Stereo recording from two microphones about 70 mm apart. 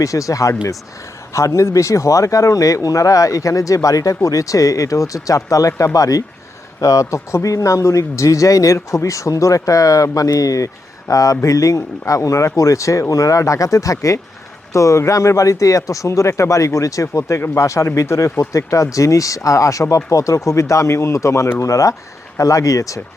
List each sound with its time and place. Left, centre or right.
0.0 s speech: left